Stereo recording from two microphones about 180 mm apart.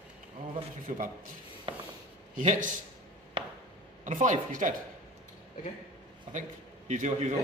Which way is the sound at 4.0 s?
45° right (ahead or behind).